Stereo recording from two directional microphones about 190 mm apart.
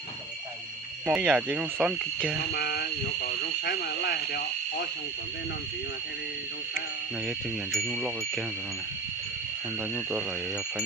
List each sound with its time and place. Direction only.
1.0 s speech: 5° right (ahead or behind)
2.5 s speech: 60° left (ahead or behind)
7.3 s speech: centre (ahead or behind)